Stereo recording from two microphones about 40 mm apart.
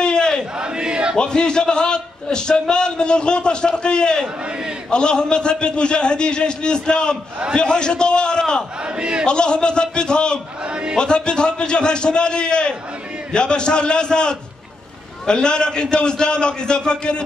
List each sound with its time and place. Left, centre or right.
0.0 s battle cry: centre
0.6 s battle cry: right
1.1 s a man's voice: left
8.8 s a man's voice: right
9.2 s a man's voice: left
10.7 s a man's voice: right
11.0 s a man's voice: left